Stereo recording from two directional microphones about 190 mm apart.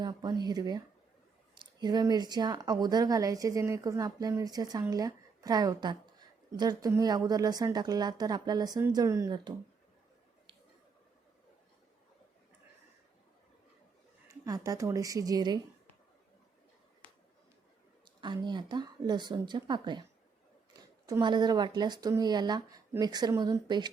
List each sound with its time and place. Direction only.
0.0 s speech: 20° right (ahead or behind)
14.3 s speech: 15° right (ahead or behind)
18.2 s speech: 25° right (ahead or behind)